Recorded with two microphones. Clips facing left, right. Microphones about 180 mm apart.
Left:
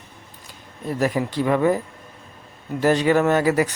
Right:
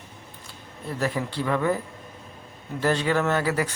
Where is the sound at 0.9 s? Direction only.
15° left (ahead or behind).